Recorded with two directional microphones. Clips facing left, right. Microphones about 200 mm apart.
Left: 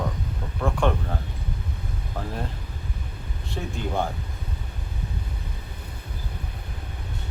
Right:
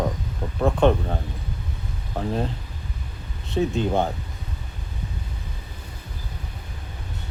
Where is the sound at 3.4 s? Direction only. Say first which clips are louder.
Right 9 dB; 20° right (ahead or behind).